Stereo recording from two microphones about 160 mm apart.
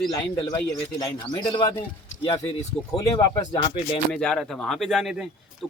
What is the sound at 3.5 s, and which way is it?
Speech, 35° left (ahead or behind).